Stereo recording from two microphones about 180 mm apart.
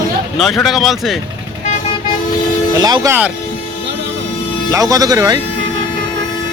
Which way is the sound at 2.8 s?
20° right (ahead or behind).